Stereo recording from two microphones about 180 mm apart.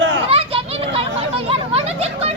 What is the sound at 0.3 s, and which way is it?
Children playing, 30° right (ahead or behind).